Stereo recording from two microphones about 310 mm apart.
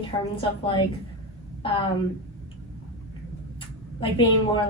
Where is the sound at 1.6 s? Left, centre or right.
Centre.